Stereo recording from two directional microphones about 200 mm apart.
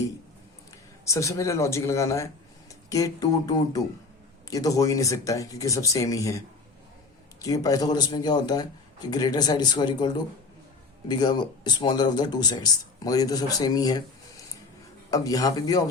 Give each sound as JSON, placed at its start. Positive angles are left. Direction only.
{"t": 1.0, "sound": "speech", "side_deg": 15}
{"t": 7.4, "sound": "speech", "side_deg": 15}
{"t": 15.1, "sound": "speech", "side_deg": 20}